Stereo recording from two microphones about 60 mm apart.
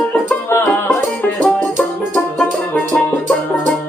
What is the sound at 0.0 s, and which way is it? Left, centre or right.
Music, left.